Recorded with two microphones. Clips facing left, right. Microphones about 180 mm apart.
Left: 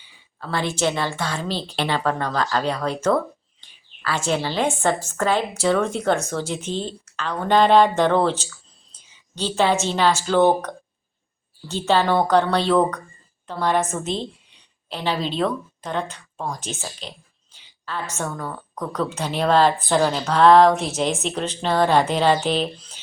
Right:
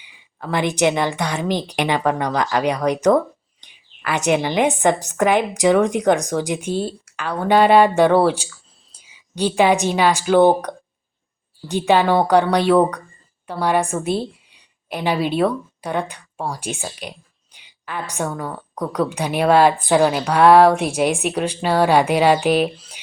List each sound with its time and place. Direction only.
0.0 s a woman's voice: 15° right (ahead or behind)